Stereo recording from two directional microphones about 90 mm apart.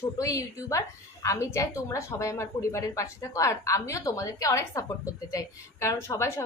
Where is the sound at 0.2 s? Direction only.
35° left (ahead or behind).